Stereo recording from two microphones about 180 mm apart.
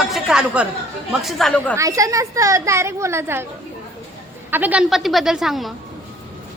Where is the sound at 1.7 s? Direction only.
20° right (ahead or behind).